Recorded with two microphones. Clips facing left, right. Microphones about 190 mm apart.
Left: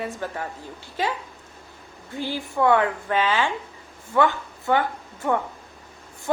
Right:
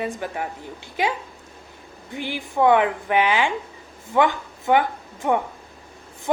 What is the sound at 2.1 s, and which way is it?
A woman's voice, 15° right (ahead or behind).